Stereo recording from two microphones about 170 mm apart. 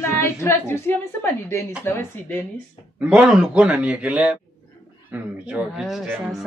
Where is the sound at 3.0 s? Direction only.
5° right (ahead or behind).